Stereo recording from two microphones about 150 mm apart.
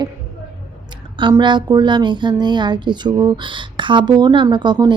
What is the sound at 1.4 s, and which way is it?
Speech, 30° right (ahead or behind).